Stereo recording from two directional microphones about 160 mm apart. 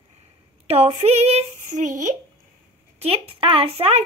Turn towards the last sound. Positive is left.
turn(degrees=-40)  # may be behind; listen again after turning